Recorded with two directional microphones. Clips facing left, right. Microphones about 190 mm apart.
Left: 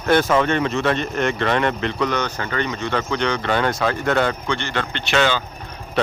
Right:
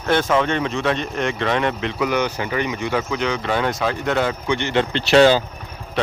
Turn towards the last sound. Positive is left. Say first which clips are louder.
# right 7 dB
turn(degrees=-35)  # may be behind; listen again after turning